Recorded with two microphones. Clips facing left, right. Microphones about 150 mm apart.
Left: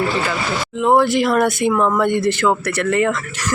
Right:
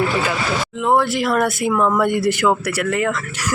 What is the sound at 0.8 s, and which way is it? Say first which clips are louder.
Speech: left 4 dB; centre (ahead or behind).